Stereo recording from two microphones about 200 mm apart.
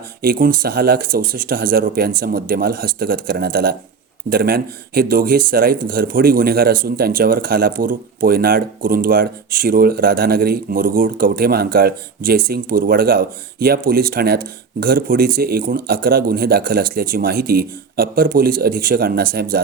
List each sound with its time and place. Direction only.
0.2 s speech: 45° right (ahead or behind)